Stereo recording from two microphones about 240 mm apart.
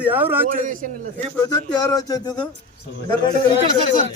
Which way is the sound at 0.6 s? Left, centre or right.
Right.